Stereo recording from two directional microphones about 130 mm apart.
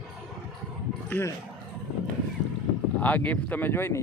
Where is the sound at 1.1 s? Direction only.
20° left (ahead or behind).